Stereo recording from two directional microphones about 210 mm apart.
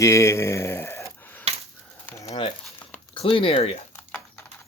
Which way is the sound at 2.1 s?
15° left (ahead or behind).